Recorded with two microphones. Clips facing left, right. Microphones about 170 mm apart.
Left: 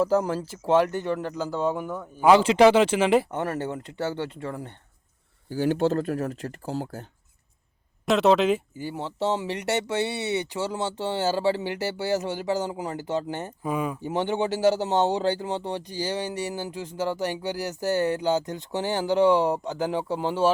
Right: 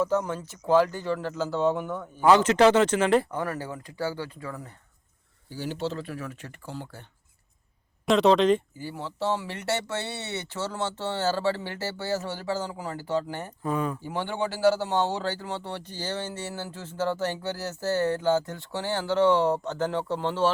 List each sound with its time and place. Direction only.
0.0 s speech: 30° left (ahead or behind); by 3.2 s 10° left (ahead or behind)
3.3 s speech: 25° left (ahead or behind)
5.5 s speech: 50° left (ahead or behind)
8.0 s speech: 5° left (ahead or behind)
8.8 s speech: 20° left (ahead or behind)
13.6 s speech: 10° left (ahead or behind)
14.0 s speech: 20° left (ahead or behind)